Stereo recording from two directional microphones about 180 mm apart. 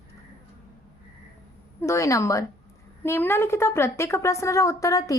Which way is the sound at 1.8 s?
15° left (ahead or behind).